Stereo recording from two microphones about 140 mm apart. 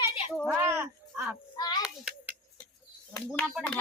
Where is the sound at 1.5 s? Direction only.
30° left (ahead or behind).